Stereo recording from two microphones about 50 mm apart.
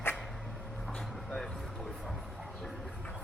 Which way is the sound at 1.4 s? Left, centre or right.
Centre.